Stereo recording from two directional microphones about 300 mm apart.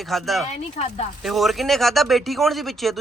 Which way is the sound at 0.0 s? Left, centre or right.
Centre.